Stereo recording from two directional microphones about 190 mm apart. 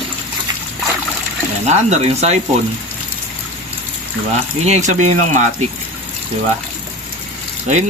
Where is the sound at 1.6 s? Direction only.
35° right (ahead or behind).